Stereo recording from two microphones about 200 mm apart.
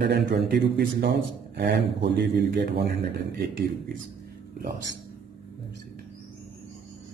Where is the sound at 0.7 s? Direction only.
50° right (ahead or behind).